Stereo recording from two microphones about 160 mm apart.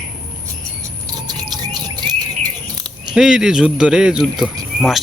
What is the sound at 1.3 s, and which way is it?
Bird, 25° right (ahead or behind).